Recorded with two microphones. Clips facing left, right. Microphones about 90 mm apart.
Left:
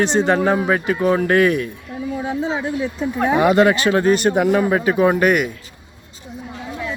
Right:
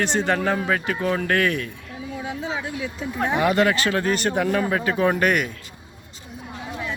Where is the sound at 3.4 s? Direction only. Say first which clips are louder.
Left 5 dB; 20° left (ahead or behind).